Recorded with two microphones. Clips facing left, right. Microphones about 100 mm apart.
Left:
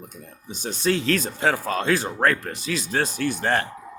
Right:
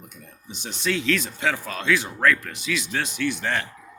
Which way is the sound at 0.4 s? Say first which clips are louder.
Left 4 dB; 40° left (ahead or behind).